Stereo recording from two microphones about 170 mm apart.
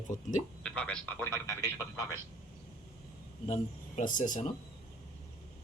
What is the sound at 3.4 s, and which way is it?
Speech, 40° left (ahead or behind).